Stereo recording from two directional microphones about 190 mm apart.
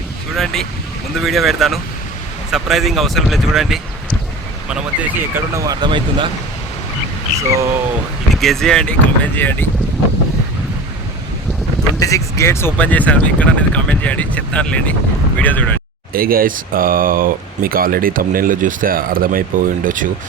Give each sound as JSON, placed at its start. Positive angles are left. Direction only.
{"t": 0.3, "sound": "speech", "side_deg": 0}
{"t": 7.5, "sound": "speech", "side_deg": -15}
{"t": 8.3, "sound": "speech", "side_deg": 0}
{"t": 11.9, "sound": "speech", "side_deg": 15}
{"t": 16.1, "sound": "speech", "side_deg": -50}